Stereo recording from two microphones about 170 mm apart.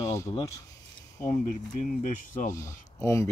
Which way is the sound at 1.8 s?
45° left (ahead or behind).